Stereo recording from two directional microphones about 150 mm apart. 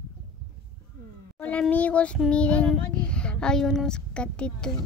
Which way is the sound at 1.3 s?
10° left (ahead or behind).